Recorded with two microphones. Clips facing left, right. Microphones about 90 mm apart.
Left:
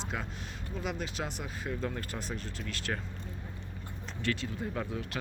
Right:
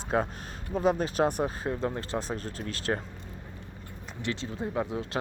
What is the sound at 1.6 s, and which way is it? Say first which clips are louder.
Speech: right 5 dB; 30° right (ahead or behind).